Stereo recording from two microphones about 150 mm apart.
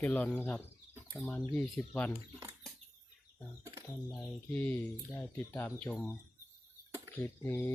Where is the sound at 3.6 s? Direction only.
20° right (ahead or behind).